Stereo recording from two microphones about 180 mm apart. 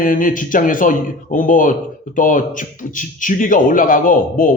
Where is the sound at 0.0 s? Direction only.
50° left (ahead or behind).